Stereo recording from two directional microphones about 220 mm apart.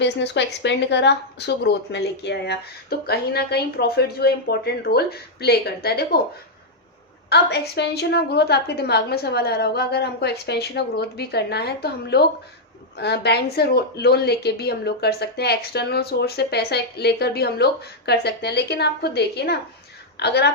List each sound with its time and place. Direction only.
0.0 s speech: 50° left (ahead or behind)
7.3 s speech: 50° left (ahead or behind)